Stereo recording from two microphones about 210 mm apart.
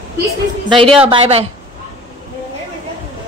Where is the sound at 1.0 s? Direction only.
30° right (ahead or behind).